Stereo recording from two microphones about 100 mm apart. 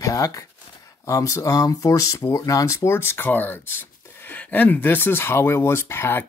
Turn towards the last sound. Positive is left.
turn(degrees=25)  # may be behind; listen again after turning